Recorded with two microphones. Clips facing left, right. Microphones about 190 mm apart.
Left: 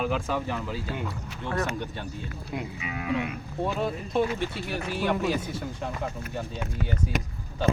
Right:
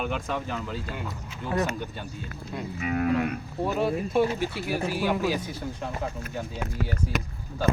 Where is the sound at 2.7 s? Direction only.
50° right (ahead or behind).